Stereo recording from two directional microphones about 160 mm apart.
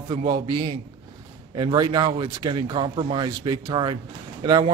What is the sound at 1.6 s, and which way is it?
A man's voice, 25° right (ahead or behind).